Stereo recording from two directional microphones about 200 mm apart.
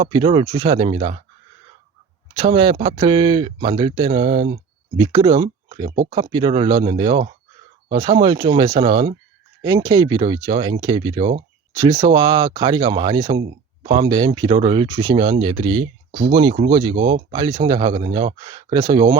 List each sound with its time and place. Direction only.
0.0 s speech: 20° right (ahead or behind)
2.4 s speech: 25° right (ahead or behind)